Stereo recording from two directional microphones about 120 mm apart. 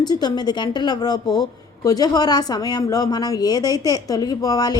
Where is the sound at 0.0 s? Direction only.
35° left (ahead or behind).